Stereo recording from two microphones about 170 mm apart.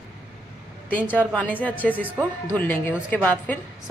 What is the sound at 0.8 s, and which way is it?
Speech, 10° left (ahead or behind).